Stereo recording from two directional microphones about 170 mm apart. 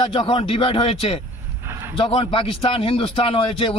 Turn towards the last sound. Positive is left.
turn(degrees=30)  # may be behind; listen again after turning